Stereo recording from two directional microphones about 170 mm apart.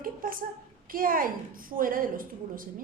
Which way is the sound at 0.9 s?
55° right (ahead or behind).